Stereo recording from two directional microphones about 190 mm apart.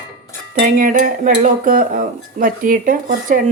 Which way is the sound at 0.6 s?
45° right (ahead or behind).